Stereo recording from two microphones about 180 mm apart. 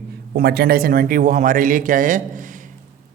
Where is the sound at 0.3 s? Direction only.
60° right (ahead or behind).